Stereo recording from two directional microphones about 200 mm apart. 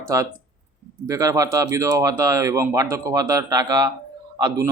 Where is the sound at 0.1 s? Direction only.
15° right (ahead or behind).